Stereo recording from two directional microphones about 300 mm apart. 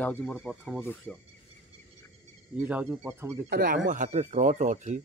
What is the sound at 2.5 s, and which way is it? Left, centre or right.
Speech, centre.